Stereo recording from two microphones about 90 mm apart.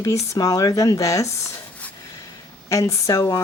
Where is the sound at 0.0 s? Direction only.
40° left (ahead or behind).